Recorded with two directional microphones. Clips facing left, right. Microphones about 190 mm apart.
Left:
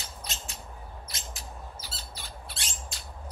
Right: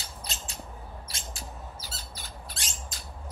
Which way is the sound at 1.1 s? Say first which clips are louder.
Right 1 dB; 35° right (ahead or behind).